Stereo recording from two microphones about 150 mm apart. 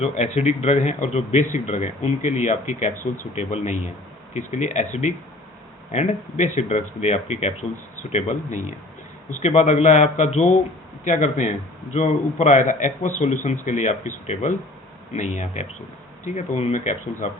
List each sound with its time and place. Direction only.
0.0 s a man's voice: 45° left (ahead or behind)